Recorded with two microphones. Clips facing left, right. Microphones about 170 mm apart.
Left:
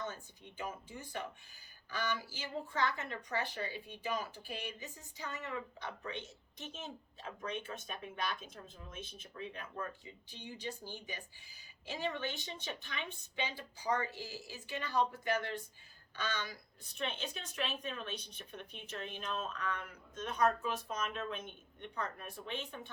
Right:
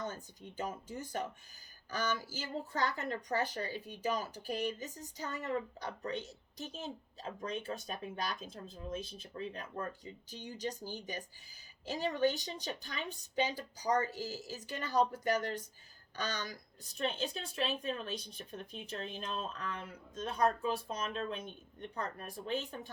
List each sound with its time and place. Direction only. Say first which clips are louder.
0.0 s speech: right 2 dB; 45° right (ahead or behind)